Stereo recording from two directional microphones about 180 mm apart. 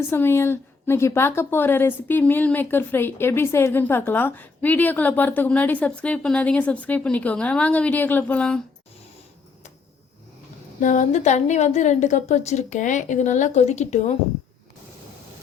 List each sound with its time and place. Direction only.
0.1 s a woman's voice: 15° left (ahead or behind)
10.8 s a woman's voice: 45° left (ahead or behind)